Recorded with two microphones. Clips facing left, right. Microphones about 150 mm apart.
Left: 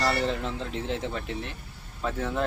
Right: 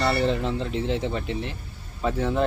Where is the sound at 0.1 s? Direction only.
Centre (ahead or behind).